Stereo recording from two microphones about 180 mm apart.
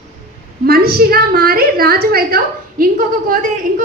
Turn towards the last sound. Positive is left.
turn(degrees=-50)  # may be behind; listen again after turning